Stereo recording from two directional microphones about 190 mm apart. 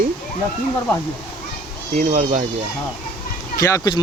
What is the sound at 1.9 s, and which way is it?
Speech, 40° right (ahead or behind).